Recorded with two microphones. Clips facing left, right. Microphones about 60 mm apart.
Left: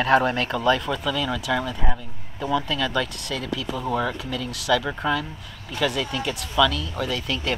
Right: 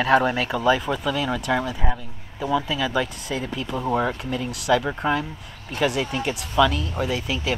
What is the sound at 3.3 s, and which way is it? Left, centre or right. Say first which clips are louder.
Speech: even; right.